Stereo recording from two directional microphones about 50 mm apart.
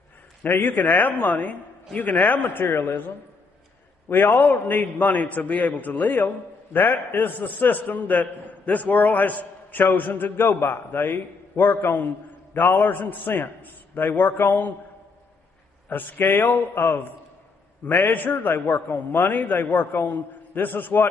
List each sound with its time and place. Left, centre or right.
0.4 s a man's voice: left
4.1 s a man's voice: left
15.9 s a man's voice: left